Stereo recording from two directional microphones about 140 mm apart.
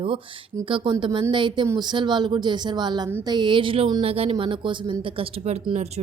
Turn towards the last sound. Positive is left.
turn(degrees=-50)  # may be behind; listen again after turning